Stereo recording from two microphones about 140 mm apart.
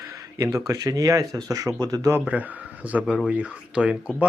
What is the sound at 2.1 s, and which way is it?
A man's voice, 10° right (ahead or behind).